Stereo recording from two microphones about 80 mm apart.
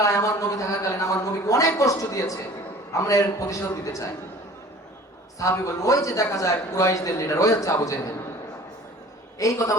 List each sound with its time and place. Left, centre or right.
0.0 s a sound: left
2.9 s a man's voice: left
5.4 s a man's voice: left
9.4 s a man's voice: left